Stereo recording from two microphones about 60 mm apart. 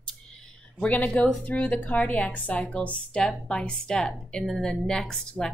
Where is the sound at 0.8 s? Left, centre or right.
Centre.